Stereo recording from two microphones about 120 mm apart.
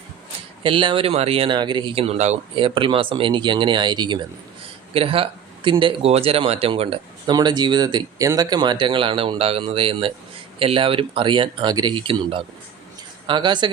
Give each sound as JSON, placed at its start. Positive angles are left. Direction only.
{"t": 0.6, "sound": "speech", "side_deg": -45}
{"t": 2.6, "sound": "speech", "side_deg": -45}
{"t": 4.9, "sound": "speech", "side_deg": -50}
{"t": 7.3, "sound": "speech", "side_deg": -35}